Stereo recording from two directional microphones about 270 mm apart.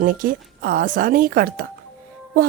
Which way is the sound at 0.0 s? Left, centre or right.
Right.